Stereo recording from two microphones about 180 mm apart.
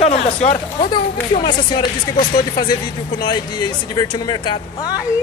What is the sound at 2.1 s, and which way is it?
Speech, 50° left (ahead or behind).